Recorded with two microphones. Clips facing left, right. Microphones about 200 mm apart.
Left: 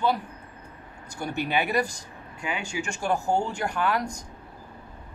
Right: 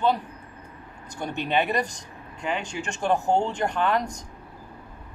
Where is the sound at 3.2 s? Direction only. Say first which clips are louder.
Right 2 dB; 20° right (ahead or behind).